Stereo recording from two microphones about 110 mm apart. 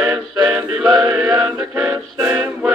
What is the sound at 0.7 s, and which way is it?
Music, 5° right (ahead or behind).